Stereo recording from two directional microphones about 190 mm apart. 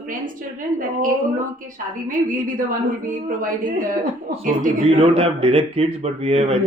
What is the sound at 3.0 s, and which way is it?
Speech, 45° right (ahead or behind).